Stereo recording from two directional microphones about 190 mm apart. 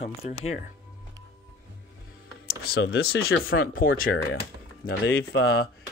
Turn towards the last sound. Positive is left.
turn(degrees=60)  # may be behind; listen again after turning